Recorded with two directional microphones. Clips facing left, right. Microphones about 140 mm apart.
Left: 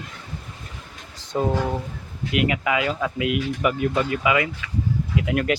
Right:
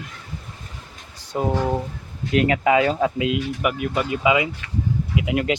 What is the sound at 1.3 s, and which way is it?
Speech, 10° right (ahead or behind).